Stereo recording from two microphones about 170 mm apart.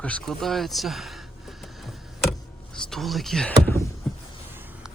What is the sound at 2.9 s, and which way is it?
Speech, centre (ahead or behind).